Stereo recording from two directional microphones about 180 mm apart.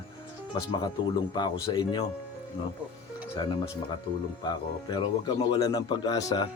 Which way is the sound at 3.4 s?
25° left (ahead or behind).